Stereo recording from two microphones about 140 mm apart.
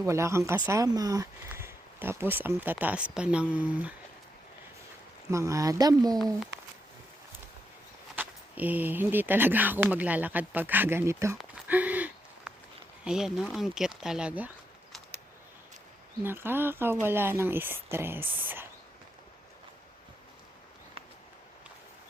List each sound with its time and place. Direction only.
0.0 s speech: 20° right (ahead or behind)
5.3 s speech: 20° right (ahead or behind)
8.1 s speech: 10° right (ahead or behind)
11.3 s a sound: 10° right (ahead or behind)
13.1 s speech: 5° right (ahead or behind)
16.2 s speech: 15° right (ahead or behind)